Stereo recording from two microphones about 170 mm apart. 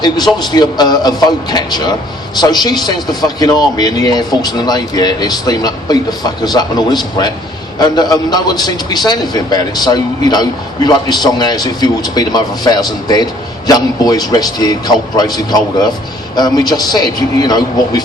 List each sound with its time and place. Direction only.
0.3 s a man's voice: 25° left (ahead or behind)